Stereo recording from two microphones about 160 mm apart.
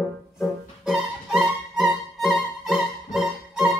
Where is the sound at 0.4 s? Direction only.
Centre (ahead or behind).